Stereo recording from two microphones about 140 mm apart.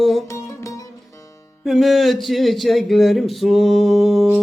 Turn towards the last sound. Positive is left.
turn(degrees=-5)  # may be behind; listen again after turning